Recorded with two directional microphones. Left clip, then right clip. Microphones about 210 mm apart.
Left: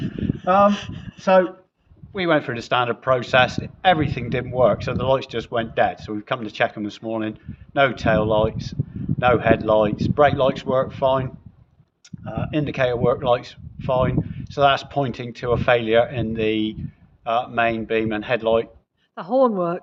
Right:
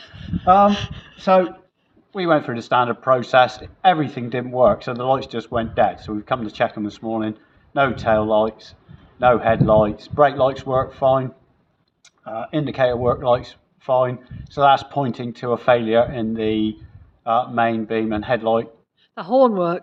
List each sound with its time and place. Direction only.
0.1 s a sound: 5° left (ahead or behind)
2.1 s a man's voice: 15° left (ahead or behind)
19.1 s speech: centre (ahead or behind)